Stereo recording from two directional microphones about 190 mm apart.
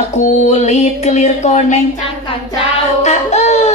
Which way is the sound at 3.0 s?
35° left (ahead or behind).